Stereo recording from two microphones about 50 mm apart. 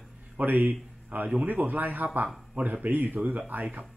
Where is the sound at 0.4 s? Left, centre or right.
Right.